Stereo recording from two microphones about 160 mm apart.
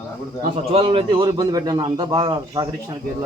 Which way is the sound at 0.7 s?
35° right (ahead or behind).